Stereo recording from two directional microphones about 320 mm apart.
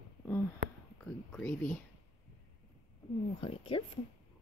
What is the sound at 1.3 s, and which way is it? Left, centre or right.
Speech, centre.